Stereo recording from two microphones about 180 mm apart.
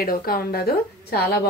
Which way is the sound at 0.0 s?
55° left (ahead or behind).